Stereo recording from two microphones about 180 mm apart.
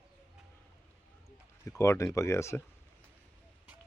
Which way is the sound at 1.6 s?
15° left (ahead or behind).